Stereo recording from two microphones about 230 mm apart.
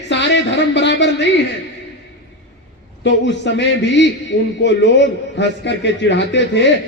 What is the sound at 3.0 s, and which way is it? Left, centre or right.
Speech, left.